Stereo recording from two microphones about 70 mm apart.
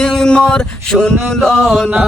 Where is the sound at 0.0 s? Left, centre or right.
Centre.